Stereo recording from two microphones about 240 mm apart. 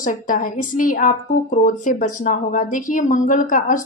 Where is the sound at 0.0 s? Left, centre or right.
Left.